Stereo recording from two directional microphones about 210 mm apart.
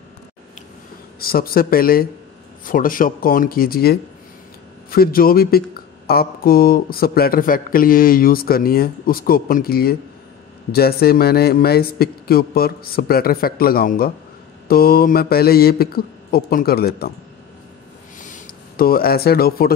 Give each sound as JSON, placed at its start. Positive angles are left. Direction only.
{"t": 1.2, "sound": "speech", "side_deg": 45}
{"t": 18.2, "sound": "speech", "side_deg": 40}